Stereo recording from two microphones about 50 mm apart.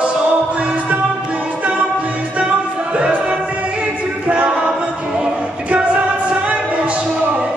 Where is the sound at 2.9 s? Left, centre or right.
Right.